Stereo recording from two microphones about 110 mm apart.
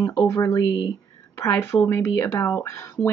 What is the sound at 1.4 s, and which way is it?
Speech, 25° left (ahead or behind).